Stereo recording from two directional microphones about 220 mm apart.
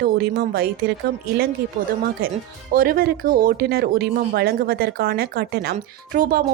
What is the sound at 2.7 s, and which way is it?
A woman's voice, 40° right (ahead or behind).